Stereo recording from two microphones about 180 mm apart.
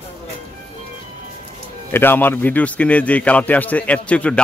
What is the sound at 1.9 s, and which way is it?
A man's voice, 10° left (ahead or behind).